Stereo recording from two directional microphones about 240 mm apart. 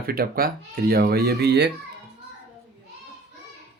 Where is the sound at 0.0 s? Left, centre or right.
Right.